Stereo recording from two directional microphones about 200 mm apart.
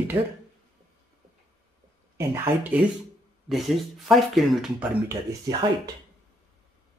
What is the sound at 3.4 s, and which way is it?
Speech, centre (ahead or behind).